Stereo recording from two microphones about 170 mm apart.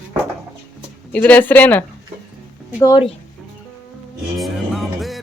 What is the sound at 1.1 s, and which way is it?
Speech, 10° left (ahead or behind).